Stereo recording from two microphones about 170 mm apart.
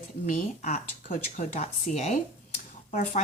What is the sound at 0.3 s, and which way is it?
A woman's voice, 45° left (ahead or behind).